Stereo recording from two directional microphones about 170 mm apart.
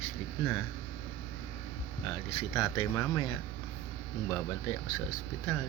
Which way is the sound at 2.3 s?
30° left (ahead or behind).